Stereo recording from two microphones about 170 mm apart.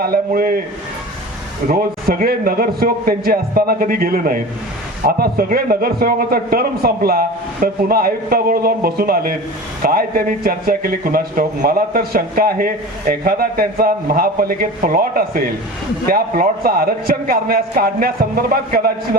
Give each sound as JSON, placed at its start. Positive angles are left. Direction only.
{"t": 0.0, "sound": "a man's voice", "side_deg": -60}
{"t": 1.6, "sound": "a man's voice", "side_deg": -60}